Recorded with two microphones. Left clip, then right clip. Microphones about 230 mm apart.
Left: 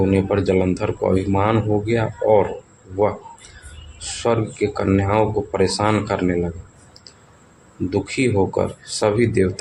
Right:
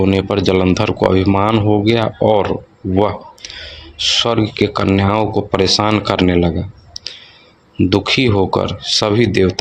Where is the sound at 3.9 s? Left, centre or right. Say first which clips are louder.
Right 7 dB; right.